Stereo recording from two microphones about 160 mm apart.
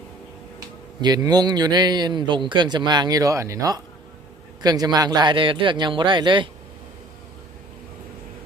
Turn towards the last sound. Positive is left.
turn(degrees=-30)  # may be behind; listen again after turning